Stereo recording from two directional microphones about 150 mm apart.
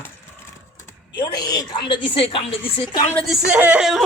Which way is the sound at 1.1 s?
30° left (ahead or behind).